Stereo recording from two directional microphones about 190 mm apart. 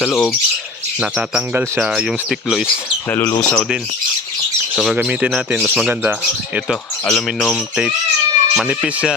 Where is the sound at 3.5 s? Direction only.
Centre (ahead or behind).